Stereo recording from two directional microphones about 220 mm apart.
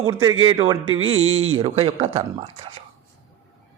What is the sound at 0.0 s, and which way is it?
A man's voice, 20° right (ahead or behind).